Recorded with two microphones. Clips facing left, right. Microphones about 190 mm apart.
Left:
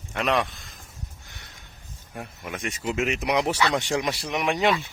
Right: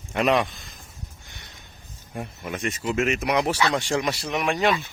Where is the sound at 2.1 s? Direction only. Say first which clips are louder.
Right 3 dB; 5° left (ahead or behind); by 4.7 s 20° left (ahead or behind).